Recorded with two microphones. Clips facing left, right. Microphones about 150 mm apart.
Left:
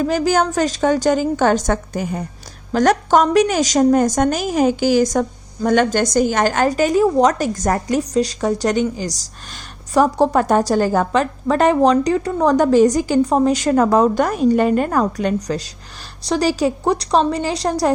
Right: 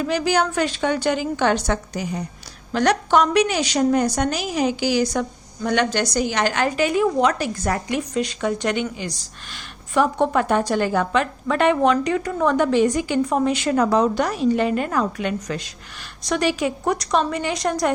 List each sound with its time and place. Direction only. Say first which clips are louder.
0.0 s a woman's voice: left 4 dB; 45° left (ahead or behind)